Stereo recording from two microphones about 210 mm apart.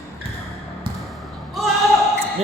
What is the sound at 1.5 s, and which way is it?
Basketball bounce, centre (ahead or behind).